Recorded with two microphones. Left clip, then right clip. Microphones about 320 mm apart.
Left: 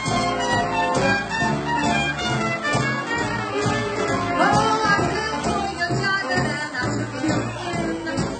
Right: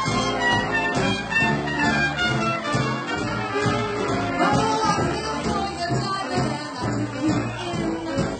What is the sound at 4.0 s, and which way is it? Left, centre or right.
Music, centre.